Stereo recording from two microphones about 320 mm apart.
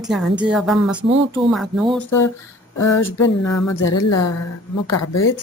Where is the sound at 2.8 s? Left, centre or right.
Left.